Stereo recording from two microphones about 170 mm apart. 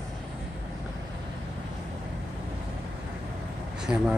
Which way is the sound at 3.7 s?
5° right (ahead or behind).